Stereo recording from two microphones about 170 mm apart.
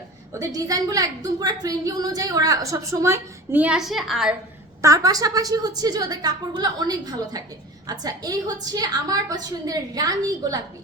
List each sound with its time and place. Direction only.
0.3 s a woman's voice: 20° right (ahead or behind); by 4.4 s centre (ahead or behind)
4.8 s a woman's voice: 20° right (ahead or behind)